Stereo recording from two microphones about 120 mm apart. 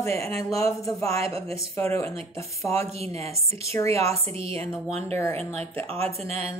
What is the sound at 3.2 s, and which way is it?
Speech, 60° right (ahead or behind).